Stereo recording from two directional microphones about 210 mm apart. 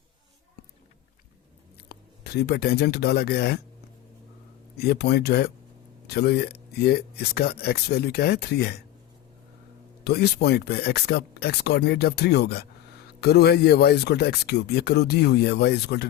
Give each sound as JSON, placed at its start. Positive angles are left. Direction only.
{"t": 1.9, "sound": "speech", "side_deg": 50}
{"t": 4.8, "sound": "speech", "side_deg": 50}
{"t": 10.0, "sound": "speech", "side_deg": 50}